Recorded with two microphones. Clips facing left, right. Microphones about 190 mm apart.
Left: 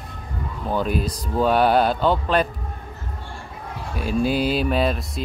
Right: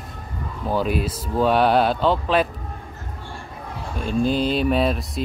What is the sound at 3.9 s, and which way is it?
Speech, 10° left (ahead or behind).